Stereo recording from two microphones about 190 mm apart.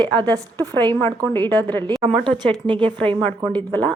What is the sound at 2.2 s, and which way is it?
Speech, 25° right (ahead or behind).